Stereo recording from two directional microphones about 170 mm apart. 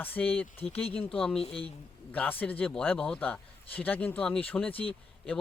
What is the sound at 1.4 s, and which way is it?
Speech, 35° left (ahead or behind).